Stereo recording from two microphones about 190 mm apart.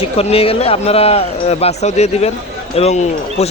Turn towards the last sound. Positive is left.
turn(degrees=35)  # may be behind; listen again after turning